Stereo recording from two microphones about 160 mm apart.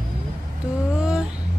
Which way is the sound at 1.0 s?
5° right (ahead or behind).